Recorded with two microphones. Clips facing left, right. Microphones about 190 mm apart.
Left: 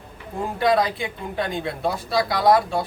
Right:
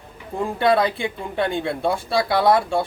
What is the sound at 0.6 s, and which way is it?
Speech, 30° right (ahead or behind).